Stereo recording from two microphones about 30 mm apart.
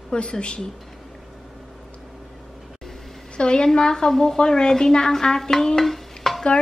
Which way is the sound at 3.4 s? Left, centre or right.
Left.